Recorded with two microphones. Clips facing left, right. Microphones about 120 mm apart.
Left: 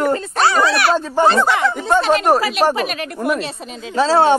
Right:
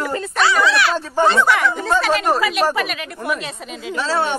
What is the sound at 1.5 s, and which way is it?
Speech, 20° left (ahead or behind).